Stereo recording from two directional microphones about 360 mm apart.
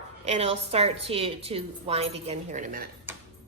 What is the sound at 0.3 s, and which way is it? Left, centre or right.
A woman's voice, centre.